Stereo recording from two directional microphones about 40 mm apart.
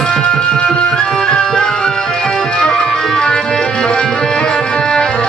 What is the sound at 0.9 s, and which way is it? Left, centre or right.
Music, centre.